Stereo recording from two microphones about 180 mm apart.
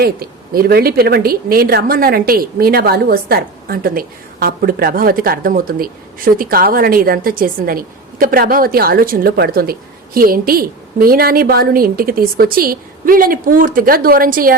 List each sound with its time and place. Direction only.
0.0 s a woman's voice: 60° right (ahead or behind)